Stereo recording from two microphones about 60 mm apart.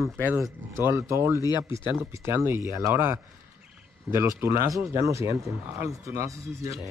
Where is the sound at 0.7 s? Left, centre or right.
Right.